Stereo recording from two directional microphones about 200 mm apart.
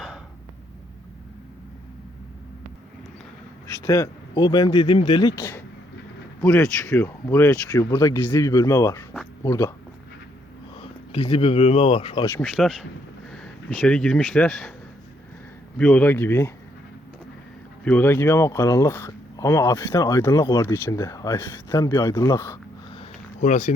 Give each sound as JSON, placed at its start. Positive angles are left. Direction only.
{"t": 3.7, "sound": "speech", "side_deg": 15}
{"t": 11.1, "sound": "speech", "side_deg": 25}
{"t": 12.2, "sound": "speech", "side_deg": 10}
{"t": 15.8, "sound": "speech", "side_deg": 5}
{"t": 17.8, "sound": "speech", "side_deg": 10}
{"t": 23.0, "sound": "a sound", "side_deg": 35}